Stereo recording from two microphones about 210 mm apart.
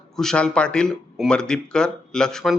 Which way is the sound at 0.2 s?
5° left (ahead or behind).